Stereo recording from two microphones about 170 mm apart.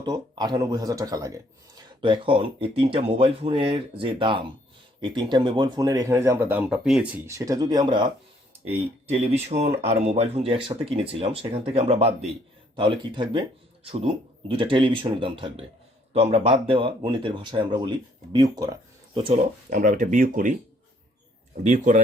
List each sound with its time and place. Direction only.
0.0 s speech: 25° right (ahead or behind)
2.0 s speech: 30° right (ahead or behind); by 7.2 s 5° right (ahead or behind)
7.3 s speech: 20° right (ahead or behind)
8.6 s speech: 35° right (ahead or behind)
19.7 s speech: 55° right (ahead or behind)
21.6 s speech: 45° right (ahead or behind)